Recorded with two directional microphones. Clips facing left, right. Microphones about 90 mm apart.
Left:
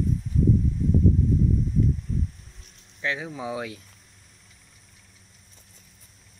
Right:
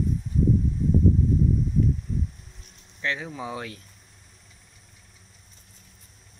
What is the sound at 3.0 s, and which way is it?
Speech, 5° left (ahead or behind).